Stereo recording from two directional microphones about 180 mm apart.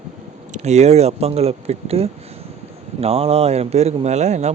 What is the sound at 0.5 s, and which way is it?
A man's voice, 40° right (ahead or behind).